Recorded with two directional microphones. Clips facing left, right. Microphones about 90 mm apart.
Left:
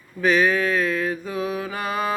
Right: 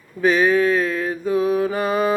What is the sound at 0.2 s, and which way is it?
Mantra, 30° right (ahead or behind).